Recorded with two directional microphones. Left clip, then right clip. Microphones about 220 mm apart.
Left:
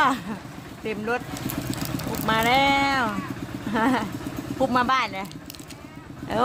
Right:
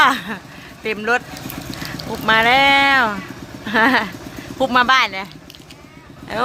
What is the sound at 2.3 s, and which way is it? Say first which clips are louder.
Speech: right 8 dB; 15° right (ahead or behind).